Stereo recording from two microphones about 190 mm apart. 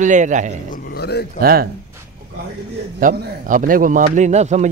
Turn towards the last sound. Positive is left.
turn(degrees=-35)  # may be behind; listen again after turning